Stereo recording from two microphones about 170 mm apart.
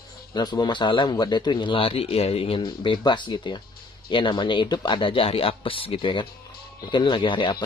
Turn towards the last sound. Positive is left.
turn(degrees=30)  # may be behind; listen again after turning